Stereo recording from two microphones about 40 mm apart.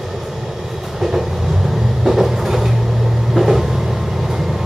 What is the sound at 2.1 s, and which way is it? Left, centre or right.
Vehicle, centre.